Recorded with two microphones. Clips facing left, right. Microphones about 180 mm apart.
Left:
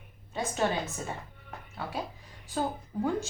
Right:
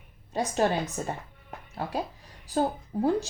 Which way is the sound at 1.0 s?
45° right (ahead or behind).